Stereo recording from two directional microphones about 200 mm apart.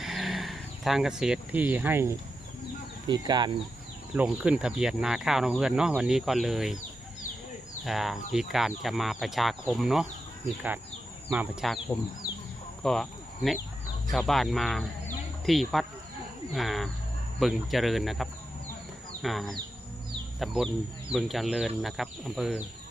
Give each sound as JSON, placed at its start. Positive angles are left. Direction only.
{"t": 0.0, "sound": "vehicle", "side_deg": 0}
{"t": 3.1, "sound": "speech", "side_deg": -20}
{"t": 4.1, "sound": "speech", "side_deg": -5}
{"t": 7.9, "sound": "speech", "side_deg": 0}
{"t": 11.3, "sound": "speech", "side_deg": 0}